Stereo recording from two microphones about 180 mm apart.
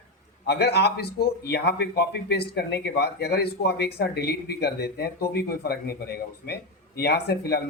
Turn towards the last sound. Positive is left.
turn(degrees=60)  # may be behind; listen again after turning